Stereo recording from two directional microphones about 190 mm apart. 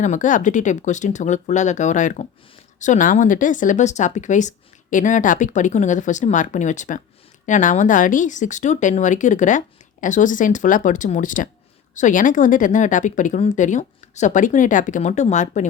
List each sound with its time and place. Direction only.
0.0 s speech: 40° left (ahead or behind)